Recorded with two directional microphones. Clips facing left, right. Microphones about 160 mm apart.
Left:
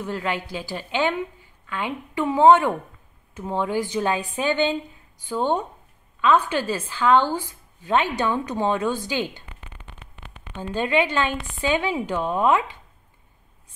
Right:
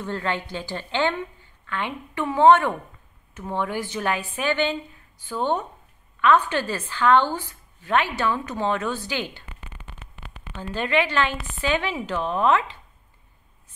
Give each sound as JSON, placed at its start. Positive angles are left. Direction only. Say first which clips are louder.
{"t": 0.0, "sound": "a woman's voice", "louder": "even", "side_deg": 10}
{"t": 10.5, "sound": "a woman's voice", "louder": "left 1 dB", "side_deg": 15}